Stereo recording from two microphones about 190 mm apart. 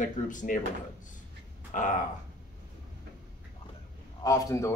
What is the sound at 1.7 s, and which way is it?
Speech, 40° left (ahead or behind).